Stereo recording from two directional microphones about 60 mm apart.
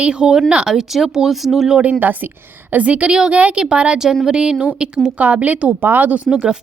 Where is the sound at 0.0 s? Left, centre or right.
Centre.